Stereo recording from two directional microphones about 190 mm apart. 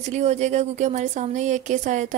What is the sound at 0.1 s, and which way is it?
Speech, 35° right (ahead or behind).